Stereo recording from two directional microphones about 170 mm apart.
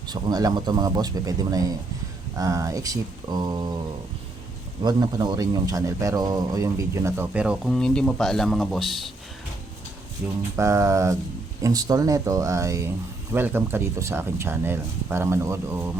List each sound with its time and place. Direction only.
0.1 s speech: 20° right (ahead or behind)
4.8 s speech: 25° right (ahead or behind); by 9.1 s centre (ahead or behind)
10.2 s speech: 10° right (ahead or behind)